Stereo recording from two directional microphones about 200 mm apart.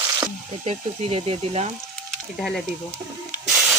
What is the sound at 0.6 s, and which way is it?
Speech, 30° right (ahead or behind).